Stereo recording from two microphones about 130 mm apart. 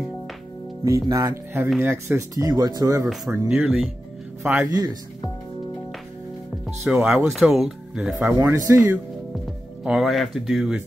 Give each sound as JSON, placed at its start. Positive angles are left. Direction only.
{"t": 0.8, "sound": "speech", "side_deg": -25}
{"t": 3.3, "sound": "a man's voice", "side_deg": -10}
{"t": 6.8, "sound": "speech", "side_deg": -5}
{"t": 9.8, "sound": "speech", "side_deg": -5}